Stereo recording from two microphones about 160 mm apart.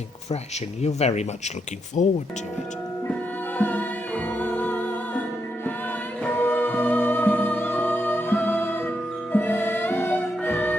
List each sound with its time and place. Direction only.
0.8 s speech: 45° left (ahead or behind)
3.6 s music: 10° left (ahead or behind)
6.2 s music: 10° left (ahead or behind)